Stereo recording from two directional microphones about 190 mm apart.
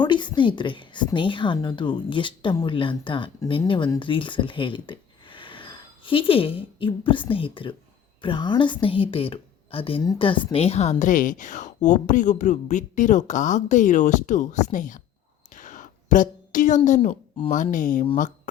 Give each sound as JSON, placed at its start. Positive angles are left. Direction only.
{"t": 0.0, "sound": "a woman's voice", "side_deg": 25}
{"t": 15.5, "sound": "a sound", "side_deg": 45}
{"t": 17.5, "sound": "speech", "side_deg": 40}